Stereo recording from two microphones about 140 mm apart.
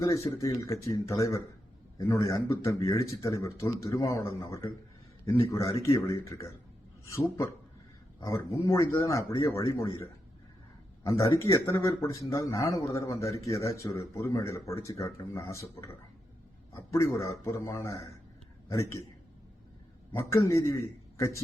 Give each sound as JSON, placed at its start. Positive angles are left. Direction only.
{"t": 0.0, "sound": "speech", "side_deg": 20}
{"t": 5.8, "sound": "speech", "side_deg": 20}
{"t": 11.0, "sound": "speech", "side_deg": 20}
{"t": 20.1, "sound": "speech", "side_deg": 20}